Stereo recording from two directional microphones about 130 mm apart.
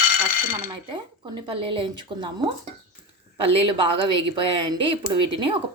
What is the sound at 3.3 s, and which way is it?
A woman's voice, 40° right (ahead or behind).